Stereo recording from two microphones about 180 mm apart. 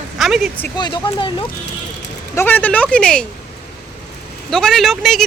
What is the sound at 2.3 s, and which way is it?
Speech, 10° left (ahead or behind).